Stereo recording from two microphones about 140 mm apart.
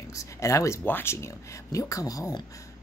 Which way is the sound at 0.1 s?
20° left (ahead or behind).